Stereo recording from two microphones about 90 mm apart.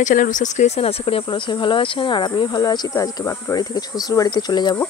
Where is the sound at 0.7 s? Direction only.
90° left.